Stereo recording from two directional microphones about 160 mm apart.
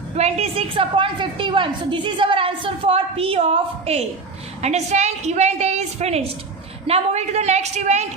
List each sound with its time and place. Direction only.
0.2 s a woman's voice: 40° right (ahead or behind)